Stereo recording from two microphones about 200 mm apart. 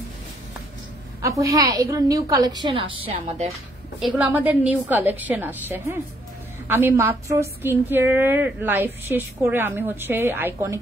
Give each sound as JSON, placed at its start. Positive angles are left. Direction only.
{"t": 1.2, "sound": "a woman's voice", "side_deg": -15}
{"t": 4.2, "sound": "a woman's voice", "side_deg": -10}